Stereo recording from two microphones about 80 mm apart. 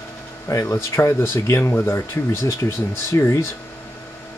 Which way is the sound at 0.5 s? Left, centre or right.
Left.